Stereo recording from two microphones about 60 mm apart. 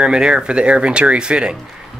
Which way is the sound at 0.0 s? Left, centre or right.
Centre.